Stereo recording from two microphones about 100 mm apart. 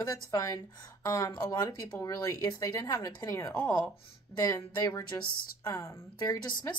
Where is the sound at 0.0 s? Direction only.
35° left (ahead or behind).